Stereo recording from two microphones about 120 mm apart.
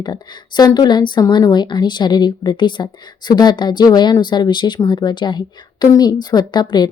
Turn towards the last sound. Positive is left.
turn(degrees=35)  # may be behind; listen again after turning